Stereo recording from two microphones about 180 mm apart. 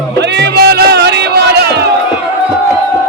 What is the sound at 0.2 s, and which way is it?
Music, 70° right (ahead or behind).